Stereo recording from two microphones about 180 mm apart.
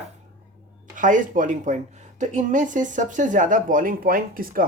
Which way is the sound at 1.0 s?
45° right (ahead or behind).